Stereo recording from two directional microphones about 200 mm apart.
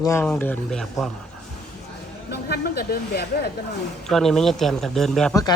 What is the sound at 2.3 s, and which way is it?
Speech, 55° left (ahead or behind).